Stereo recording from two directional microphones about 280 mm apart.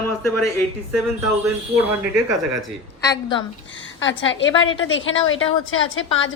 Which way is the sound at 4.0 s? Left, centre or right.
Left.